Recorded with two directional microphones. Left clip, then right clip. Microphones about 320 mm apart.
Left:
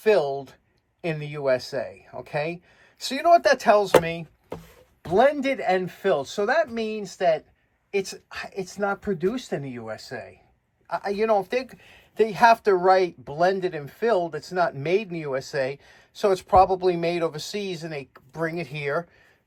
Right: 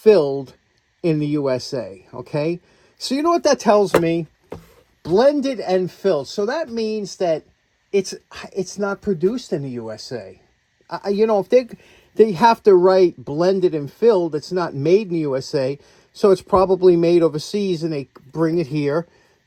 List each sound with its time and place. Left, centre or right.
0.0 s speech: right
4.4 s a sound: centre
5.0 s speech: centre